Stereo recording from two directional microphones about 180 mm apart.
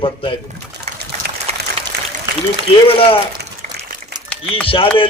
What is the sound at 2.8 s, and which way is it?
Speech, 30° left (ahead or behind).